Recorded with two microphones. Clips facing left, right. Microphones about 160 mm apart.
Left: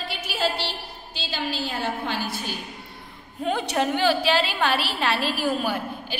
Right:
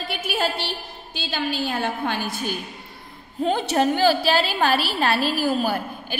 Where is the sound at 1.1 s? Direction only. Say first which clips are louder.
Right 3 dB; 55° right (ahead or behind).